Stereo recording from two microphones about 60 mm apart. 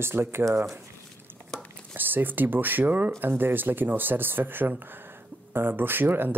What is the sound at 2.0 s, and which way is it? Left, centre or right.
Speech, right.